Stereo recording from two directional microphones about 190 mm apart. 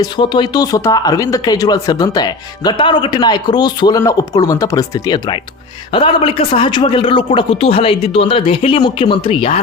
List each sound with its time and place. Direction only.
0.0 s speech: 25° left (ahead or behind)